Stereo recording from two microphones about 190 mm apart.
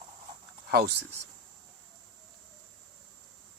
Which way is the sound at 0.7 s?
55° right (ahead or behind).